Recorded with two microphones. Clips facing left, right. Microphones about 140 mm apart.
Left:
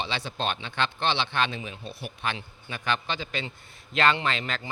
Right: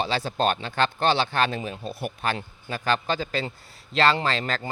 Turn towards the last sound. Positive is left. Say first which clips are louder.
# right 3 dB
turn(degrees=-40)  # may be behind; listen again after turning